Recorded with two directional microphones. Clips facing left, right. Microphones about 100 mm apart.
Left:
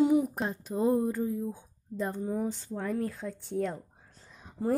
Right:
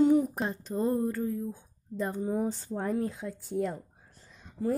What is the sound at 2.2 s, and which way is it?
Speech, 20° right (ahead or behind).